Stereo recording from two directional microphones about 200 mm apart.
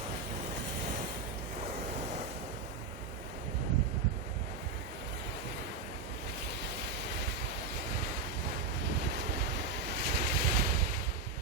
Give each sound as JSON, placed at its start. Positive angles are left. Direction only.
{"t": 9.1, "sound": "waves", "side_deg": -60}